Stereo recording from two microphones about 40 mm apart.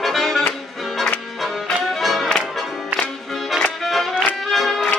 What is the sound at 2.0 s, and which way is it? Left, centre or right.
Music, centre.